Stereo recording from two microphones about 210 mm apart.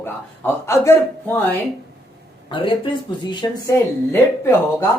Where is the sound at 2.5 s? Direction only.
25° left (ahead or behind).